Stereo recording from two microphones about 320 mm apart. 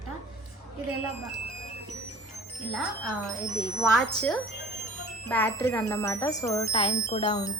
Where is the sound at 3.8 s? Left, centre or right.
Centre.